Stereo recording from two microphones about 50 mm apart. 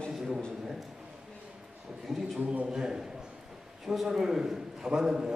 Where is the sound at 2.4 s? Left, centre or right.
Right.